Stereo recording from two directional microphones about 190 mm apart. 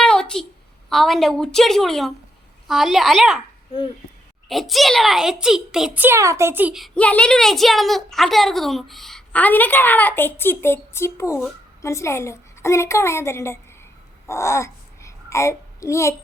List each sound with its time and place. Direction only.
0.0 s a sound: 5° left (ahead or behind)
0.9 s a child's voice: centre (ahead or behind)
4.4 s a child's voice: centre (ahead or behind)
14.3 s babbling: 15° left (ahead or behind)